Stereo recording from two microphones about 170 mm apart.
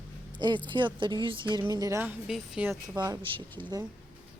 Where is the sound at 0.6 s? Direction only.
30° right (ahead or behind).